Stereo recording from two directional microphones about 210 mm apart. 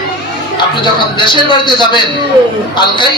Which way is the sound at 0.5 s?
20° left (ahead or behind).